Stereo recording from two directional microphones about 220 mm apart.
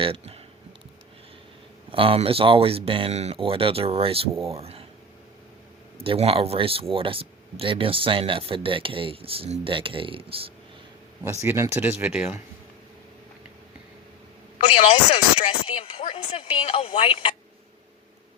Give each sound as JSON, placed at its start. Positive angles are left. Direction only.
{"t": 0.0, "sound": "speech", "side_deg": -25}
{"t": 1.9, "sound": "speech", "side_deg": -25}
{"t": 6.0, "sound": "speech", "side_deg": -25}
{"t": 11.4, "sound": "speech", "side_deg": -10}
{"t": 14.7, "sound": "speech", "side_deg": 25}